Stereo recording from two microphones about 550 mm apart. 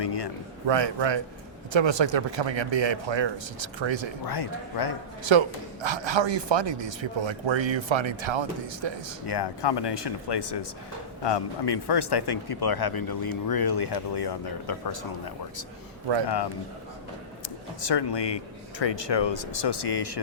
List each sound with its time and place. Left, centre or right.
0.0 s a sound: left
0.7 s a man's voice: right
4.3 s speech: left
5.2 s a man's voice: right
9.2 s speech: left
17.7 s speech: left